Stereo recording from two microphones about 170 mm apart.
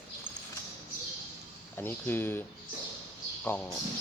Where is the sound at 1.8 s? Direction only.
10° left (ahead or behind).